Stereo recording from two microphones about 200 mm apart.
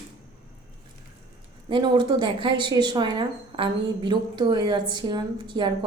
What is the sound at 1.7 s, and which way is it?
Speech, 25° right (ahead or behind).